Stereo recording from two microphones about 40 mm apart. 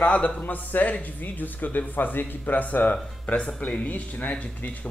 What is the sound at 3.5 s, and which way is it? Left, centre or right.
Speech, left.